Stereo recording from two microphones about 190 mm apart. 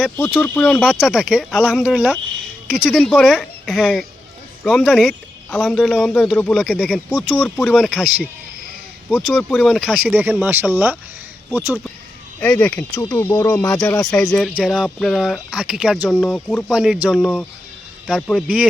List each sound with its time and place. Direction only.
0.3 s speech: 10° left (ahead or behind)
10.1 s speech: 10° right (ahead or behind)
12.4 s speech: 10° left (ahead or behind)
13.7 s speech: 5° left (ahead or behind)